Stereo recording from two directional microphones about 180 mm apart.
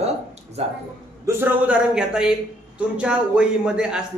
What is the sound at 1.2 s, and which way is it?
A man's voice, 15° right (ahead or behind).